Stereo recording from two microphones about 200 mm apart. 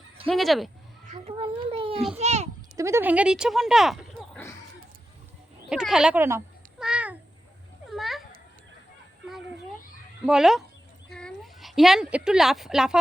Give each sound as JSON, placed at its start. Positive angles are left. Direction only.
{"t": 0.3, "sound": "speech", "side_deg": 0}
{"t": 1.0, "sound": "a child's voice", "side_deg": -35}
{"t": 2.7, "sound": "speech", "side_deg": -15}
{"t": 5.6, "sound": "cat", "side_deg": -5}
{"t": 7.9, "sound": "a sound", "side_deg": 0}
{"t": 10.2, "sound": "a woman's voice", "side_deg": 0}